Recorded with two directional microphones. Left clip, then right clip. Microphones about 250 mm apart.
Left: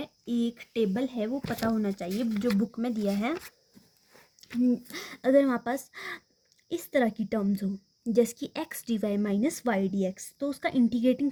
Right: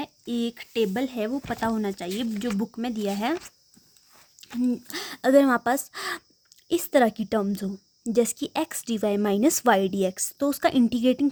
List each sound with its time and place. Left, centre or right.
0.0 s a woman's voice: right
4.4 s a woman's voice: right